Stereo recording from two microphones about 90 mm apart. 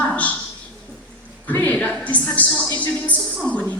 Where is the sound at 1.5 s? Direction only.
15° left (ahead or behind).